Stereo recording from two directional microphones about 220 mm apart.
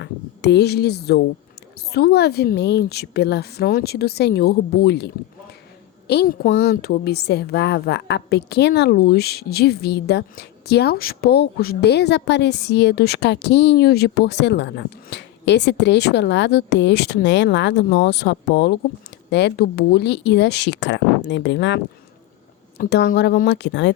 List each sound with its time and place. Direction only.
0.0 s a woman's voice: 50° left (ahead or behind)
22.8 s a woman's voice: 45° left (ahead or behind)